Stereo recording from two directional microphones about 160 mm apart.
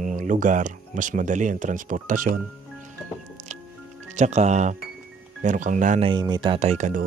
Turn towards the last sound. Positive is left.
turn(degrees=-50)  # may be behind; listen again after turning